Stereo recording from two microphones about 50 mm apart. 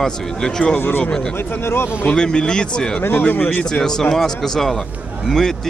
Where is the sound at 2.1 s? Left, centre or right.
Centre.